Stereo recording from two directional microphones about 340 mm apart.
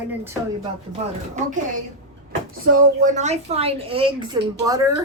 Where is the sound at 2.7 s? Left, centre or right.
Right.